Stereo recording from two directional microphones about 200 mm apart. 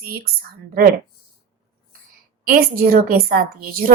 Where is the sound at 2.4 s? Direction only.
45° right (ahead or behind).